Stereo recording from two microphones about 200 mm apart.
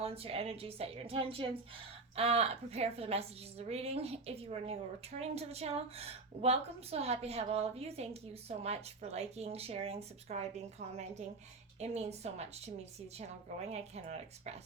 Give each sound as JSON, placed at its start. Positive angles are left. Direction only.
{"t": 0.0, "sound": "a woman's voice", "side_deg": -30}